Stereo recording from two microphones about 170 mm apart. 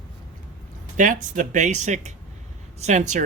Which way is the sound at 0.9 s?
50° right (ahead or behind).